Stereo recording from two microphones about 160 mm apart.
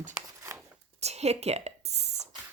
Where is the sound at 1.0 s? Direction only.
40° right (ahead or behind).